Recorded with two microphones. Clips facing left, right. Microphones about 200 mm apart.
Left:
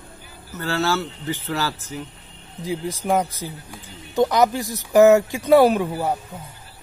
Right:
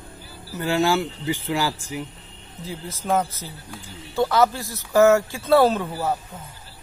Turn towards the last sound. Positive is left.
turn(degrees=20)  # may be behind; listen again after turning